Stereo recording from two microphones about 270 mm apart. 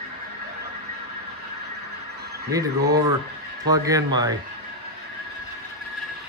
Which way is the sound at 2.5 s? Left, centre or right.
Centre.